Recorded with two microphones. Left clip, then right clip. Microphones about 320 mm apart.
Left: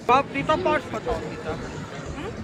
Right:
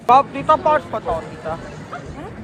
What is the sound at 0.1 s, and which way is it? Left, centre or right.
Speech, right.